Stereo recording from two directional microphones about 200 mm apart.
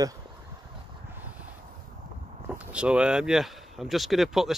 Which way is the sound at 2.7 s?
5° right (ahead or behind).